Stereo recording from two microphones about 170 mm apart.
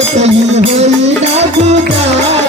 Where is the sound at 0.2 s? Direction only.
40° right (ahead or behind).